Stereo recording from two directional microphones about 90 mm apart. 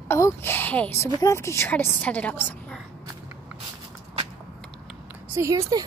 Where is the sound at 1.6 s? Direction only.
20° left (ahead or behind).